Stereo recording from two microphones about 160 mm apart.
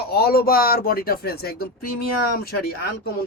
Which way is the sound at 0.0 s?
75° left (ahead or behind).